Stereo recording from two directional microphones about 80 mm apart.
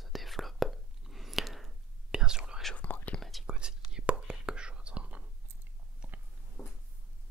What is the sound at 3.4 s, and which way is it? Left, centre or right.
Whispering, centre.